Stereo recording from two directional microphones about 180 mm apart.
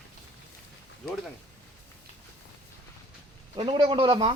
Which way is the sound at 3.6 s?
25° right (ahead or behind).